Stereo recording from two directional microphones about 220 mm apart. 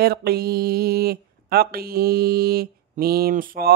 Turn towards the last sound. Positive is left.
turn(degrees=-40)  # may be behind; listen again after turning